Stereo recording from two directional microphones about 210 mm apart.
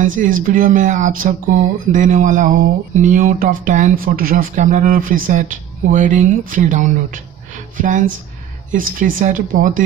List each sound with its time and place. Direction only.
0.0 s speech: 40° right (ahead or behind)